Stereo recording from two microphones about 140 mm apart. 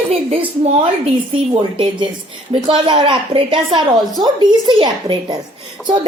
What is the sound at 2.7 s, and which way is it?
A woman's voice, 35° right (ahead or behind).